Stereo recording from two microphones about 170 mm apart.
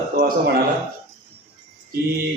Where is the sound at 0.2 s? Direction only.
65° right (ahead or behind).